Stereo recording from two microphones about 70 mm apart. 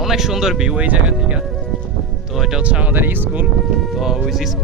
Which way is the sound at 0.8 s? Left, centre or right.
Right.